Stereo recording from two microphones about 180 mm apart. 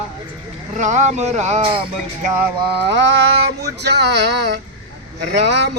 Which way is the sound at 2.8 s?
75° right (ahead or behind).